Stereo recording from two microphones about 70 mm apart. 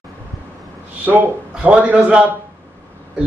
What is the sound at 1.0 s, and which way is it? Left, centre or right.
A man's voice, right.